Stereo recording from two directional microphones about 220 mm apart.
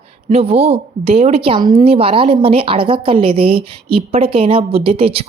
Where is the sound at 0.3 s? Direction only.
30° right (ahead or behind).